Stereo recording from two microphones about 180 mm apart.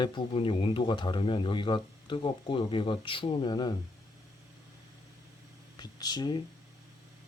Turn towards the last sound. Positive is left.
turn(degrees=25)  # may be behind; listen again after turning